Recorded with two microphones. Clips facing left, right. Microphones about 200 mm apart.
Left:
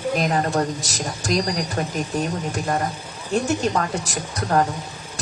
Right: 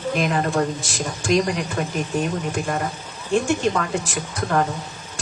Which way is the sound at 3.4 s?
40° left (ahead or behind).